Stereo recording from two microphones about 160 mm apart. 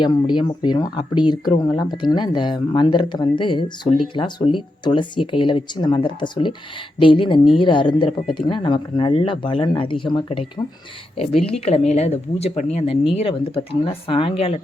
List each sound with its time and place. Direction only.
0.0 s speech: 30° left (ahead or behind)